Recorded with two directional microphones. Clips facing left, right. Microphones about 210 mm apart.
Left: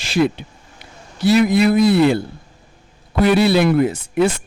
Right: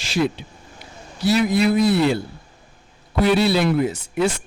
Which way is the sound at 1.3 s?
60° left (ahead or behind).